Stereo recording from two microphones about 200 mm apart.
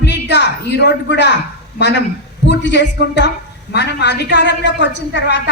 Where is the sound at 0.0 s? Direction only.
60° left (ahead or behind).